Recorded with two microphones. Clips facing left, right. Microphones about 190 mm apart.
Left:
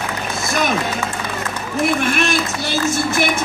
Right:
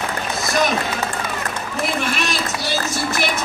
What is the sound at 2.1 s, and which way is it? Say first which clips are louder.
Speech: left 4 dB; 50° left (ahead or behind).